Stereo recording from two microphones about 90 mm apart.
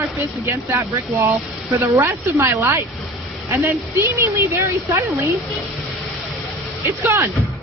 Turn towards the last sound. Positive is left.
turn(degrees=-30)  # may be behind; listen again after turning